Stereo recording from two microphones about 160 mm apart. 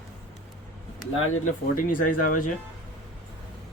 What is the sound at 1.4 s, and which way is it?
Speech, 55° left (ahead or behind).